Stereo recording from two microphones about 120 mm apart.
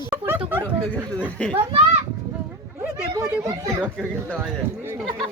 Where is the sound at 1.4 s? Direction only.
10° left (ahead or behind).